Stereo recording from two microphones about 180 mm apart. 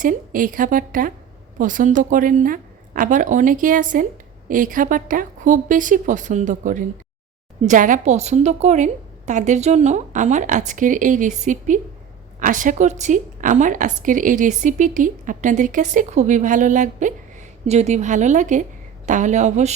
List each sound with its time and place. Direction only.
0.0 s a woman's voice: 50° right (ahead or behind)